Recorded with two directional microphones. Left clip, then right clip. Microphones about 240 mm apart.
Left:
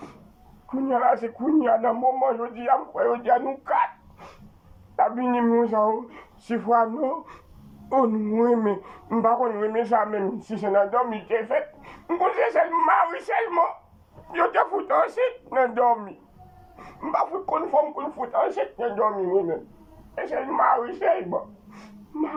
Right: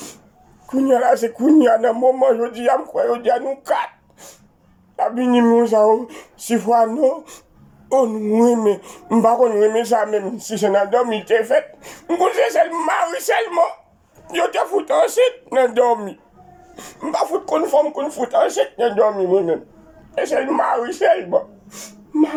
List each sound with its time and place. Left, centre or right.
0.8 s speech: centre
4.9 s speech: centre